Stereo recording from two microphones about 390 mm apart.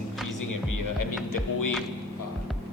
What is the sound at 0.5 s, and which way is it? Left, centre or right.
Music, left.